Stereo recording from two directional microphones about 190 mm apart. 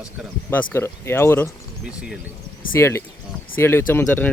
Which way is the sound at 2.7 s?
15° left (ahead or behind).